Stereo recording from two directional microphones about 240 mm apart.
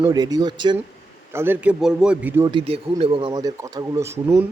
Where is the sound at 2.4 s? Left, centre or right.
Right.